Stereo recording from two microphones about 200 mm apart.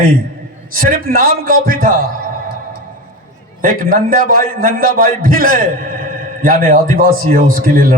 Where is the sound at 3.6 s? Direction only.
45° right (ahead or behind).